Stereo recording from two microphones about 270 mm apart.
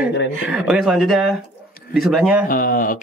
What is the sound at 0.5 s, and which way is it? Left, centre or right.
Music, centre.